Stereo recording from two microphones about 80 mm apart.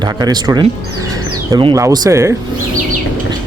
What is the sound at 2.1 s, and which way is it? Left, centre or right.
Speech, right.